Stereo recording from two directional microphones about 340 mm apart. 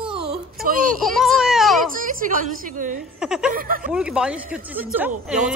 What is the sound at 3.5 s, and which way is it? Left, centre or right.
Speech, right.